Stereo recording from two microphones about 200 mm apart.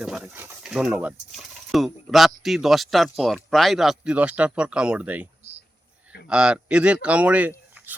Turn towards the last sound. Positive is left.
turn(degrees=-10)  # may be behind; listen again after turning